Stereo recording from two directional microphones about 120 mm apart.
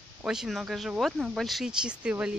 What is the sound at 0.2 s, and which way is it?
Speech, 5° right (ahead or behind).